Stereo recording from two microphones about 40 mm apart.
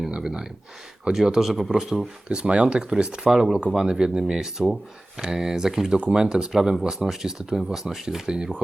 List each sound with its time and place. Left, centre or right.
0.2 s a sound: centre
1.1 s speech: centre
1.5 s speech: centre
1.8 s speech: centre
2.3 s speech: right; by 8.2 s centre
8.3 s speech: right